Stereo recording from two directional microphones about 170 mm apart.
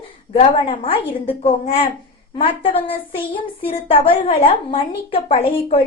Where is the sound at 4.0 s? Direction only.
35° left (ahead or behind).